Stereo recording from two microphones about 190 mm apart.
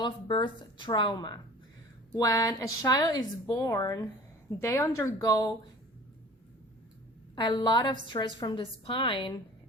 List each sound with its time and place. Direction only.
0.0 s a woman's voice: 25° left (ahead or behind)
7.3 s a woman's voice: 25° left (ahead or behind)